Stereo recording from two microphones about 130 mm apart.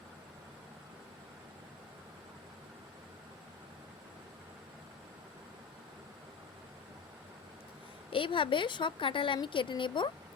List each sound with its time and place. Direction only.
8.1 s speech: 40° left (ahead or behind)